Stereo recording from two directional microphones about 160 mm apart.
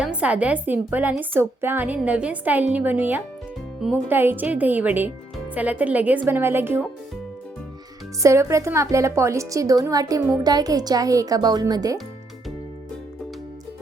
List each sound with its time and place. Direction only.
0.0 s a woman's voice: 5° right (ahead or behind)
8.2 s a woman's voice: 20° right (ahead or behind)